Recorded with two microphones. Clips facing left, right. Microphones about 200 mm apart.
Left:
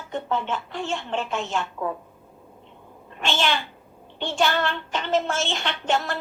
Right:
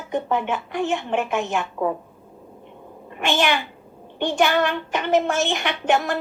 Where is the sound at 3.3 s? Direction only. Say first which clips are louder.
Right 4 dB; 15° right (ahead or behind).